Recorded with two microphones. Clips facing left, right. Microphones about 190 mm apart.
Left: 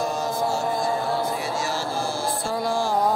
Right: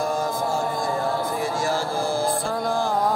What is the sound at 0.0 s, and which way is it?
Chant, 50° right (ahead or behind).